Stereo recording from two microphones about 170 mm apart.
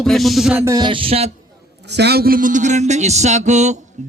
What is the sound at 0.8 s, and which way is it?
Speech, 30° right (ahead or behind).